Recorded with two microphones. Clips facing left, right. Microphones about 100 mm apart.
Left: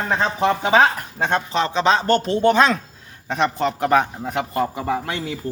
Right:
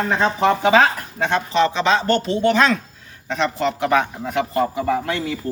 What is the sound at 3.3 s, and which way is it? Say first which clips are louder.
Speech: even; 40° left (ahead or behind).